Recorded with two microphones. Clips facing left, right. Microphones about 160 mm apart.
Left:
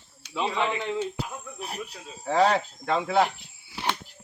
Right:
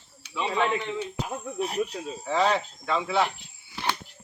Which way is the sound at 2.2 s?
50° left (ahead or behind).